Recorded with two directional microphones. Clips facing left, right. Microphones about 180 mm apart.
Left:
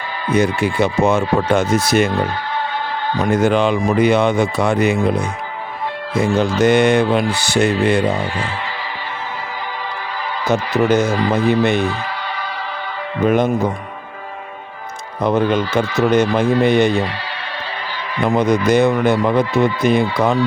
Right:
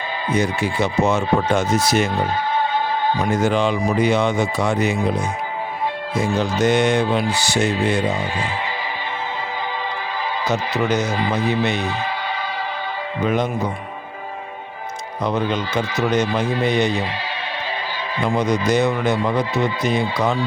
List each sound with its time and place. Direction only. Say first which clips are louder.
0.3 s speech: left 5 dB; 60° left (ahead or behind)
3.2 s speech: left 6 dB; 60° left (ahead or behind)
6.6 s speech: left 4 dB; 60° left (ahead or behind)
10.4 s speech: left 6 dB; 50° left (ahead or behind)
13.2 s speech: left 6 dB; 50° left (ahead or behind)
15.2 s speech: left 6 dB; 50° left (ahead or behind)
18.3 s speech: left 4 dB; 55° left (ahead or behind)